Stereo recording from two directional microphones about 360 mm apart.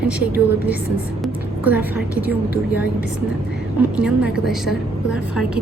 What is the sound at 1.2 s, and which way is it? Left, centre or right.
A woman's voice, centre.